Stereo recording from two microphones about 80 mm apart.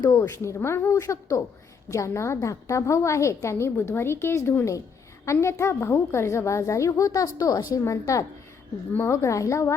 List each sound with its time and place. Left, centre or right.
0.0 s a woman's voice: left
8.9 s speech: left
9.1 s a woman's voice: left